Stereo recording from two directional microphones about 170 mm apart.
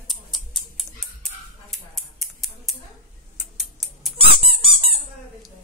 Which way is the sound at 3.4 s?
Centre (ahead or behind).